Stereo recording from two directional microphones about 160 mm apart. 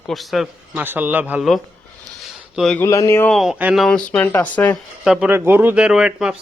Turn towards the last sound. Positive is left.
turn(degrees=-5)  # may be behind; listen again after turning